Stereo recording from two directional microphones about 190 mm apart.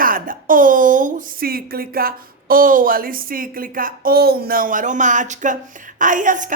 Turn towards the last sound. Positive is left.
turn(degrees=-45)  # may be behind; listen again after turning